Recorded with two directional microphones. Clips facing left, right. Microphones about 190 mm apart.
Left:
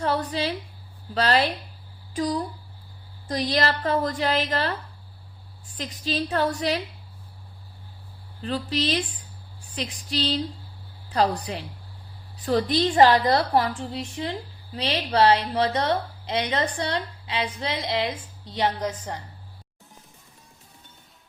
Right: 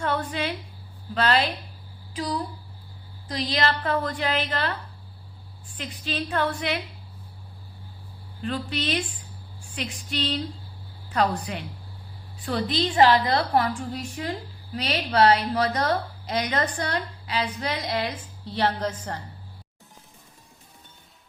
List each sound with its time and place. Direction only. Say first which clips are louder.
0.0 s a woman's voice: left 2 dB; 35° left (ahead or behind)
5.7 s a woman's voice: left 3 dB; 35° left (ahead or behind)
8.4 s a woman's voice: left 2 dB; 35° left (ahead or behind); by 19.2 s 15° left (ahead or behind)